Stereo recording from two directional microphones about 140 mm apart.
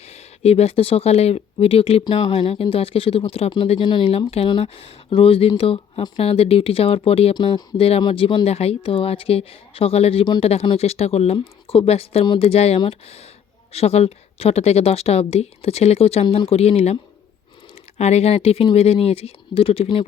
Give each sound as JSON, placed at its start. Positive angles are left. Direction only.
{"t": 0.1, "sound": "speech", "side_deg": 50}